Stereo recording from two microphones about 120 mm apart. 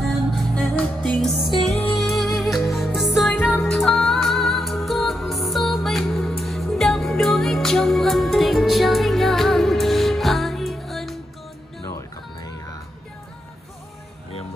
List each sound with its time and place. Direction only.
0.3 s music: centre (ahead or behind)